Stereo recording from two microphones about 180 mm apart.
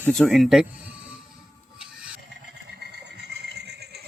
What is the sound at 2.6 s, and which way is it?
Vehicle, 65° right (ahead or behind).